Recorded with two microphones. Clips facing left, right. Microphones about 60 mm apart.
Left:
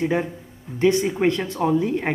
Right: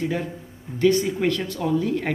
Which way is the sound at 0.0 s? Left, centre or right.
Left.